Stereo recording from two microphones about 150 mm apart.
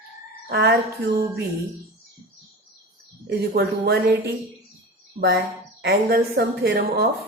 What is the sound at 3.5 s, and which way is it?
A woman's voice, 90° right.